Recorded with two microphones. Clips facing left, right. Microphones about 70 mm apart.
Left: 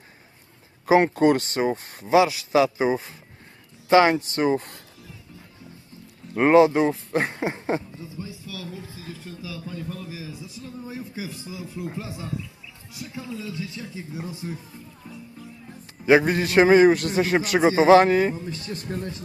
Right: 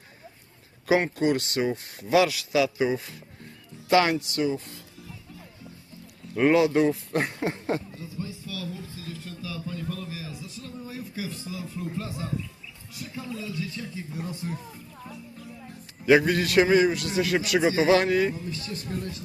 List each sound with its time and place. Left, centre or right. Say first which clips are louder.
1.0 s a man's voice: left 6 dB; left
2.0 s a man's voice: left 3 dB; left
6.3 s a man's voice: left 4 dB; left
8.2 s a sound: right 2 dB; centre; by 11.3 s left
11.3 s a man's voice: even; centre
16.0 s a man's voice: left 2 dB; left
16.6 s a man's voice: left 6 dB; left